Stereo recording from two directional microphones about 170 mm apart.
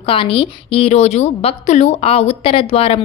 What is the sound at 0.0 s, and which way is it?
A woman's voice, 30° left (ahead or behind).